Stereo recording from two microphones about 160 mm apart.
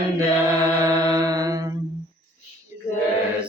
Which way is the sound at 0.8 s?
20° right (ahead or behind).